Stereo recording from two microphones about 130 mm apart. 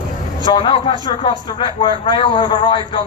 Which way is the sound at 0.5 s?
40° left (ahead or behind).